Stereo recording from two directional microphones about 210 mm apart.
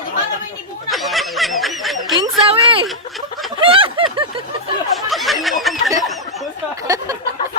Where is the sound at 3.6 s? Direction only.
25° right (ahead or behind).